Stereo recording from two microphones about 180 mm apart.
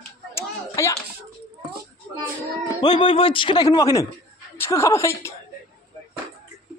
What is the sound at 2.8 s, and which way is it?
A woman's voice, 25° left (ahead or behind).